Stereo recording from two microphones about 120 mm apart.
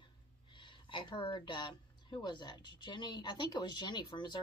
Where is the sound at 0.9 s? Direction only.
45° left (ahead or behind).